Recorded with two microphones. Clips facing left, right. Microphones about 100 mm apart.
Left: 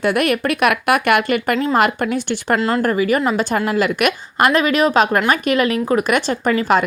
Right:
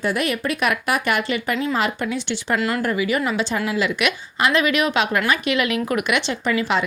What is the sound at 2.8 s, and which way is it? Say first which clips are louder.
A woman's voice: left 5 dB; 45° left (ahead or behind).